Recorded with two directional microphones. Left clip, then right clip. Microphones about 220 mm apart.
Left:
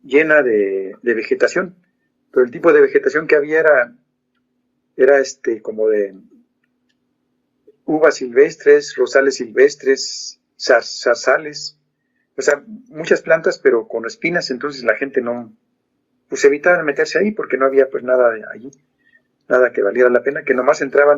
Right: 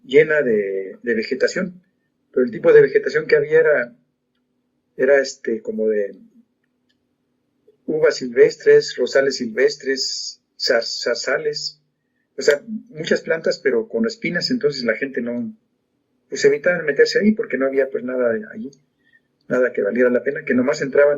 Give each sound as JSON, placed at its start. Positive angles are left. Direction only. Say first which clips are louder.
{"t": 0.1, "sound": "speech", "louder": "left 2 dB", "side_deg": 45}
{"t": 4.9, "sound": "speech", "louder": "left 4 dB", "side_deg": 45}
{"t": 7.9, "sound": "speech", "louder": "left 4 dB", "side_deg": 45}
{"t": 19.6, "sound": "speech", "louder": "left 1 dB", "side_deg": 45}